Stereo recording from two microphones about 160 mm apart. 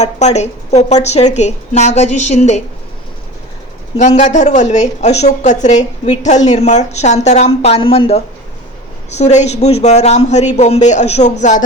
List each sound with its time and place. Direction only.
0.0 s a man's voice: 45° left (ahead or behind)
3.9 s a man's voice: 50° left (ahead or behind)